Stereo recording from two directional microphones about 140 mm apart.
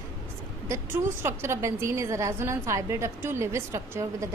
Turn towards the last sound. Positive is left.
turn(degrees=-20)  # may be behind; listen again after turning